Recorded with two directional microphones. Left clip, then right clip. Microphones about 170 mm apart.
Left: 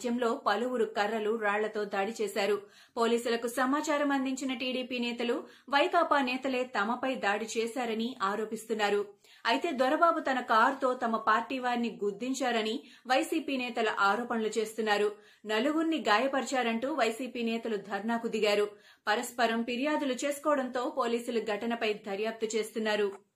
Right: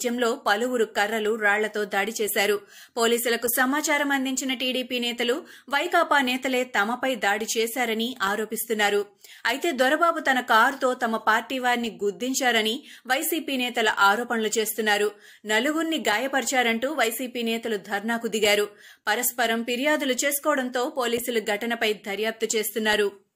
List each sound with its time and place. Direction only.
0.0 s a woman's voice: 15° right (ahead or behind)